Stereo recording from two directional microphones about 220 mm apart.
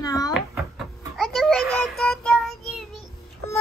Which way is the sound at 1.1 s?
Centre (ahead or behind).